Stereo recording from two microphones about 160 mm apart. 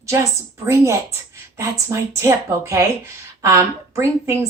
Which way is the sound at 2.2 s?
15° right (ahead or behind).